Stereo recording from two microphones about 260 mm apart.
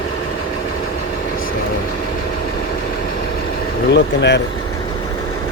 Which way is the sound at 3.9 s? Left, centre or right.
Left.